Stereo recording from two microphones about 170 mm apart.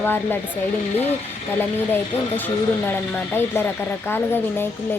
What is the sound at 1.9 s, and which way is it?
Speech, 10° left (ahead or behind).